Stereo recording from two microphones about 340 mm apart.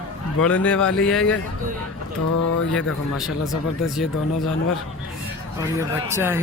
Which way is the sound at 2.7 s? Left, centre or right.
Centre.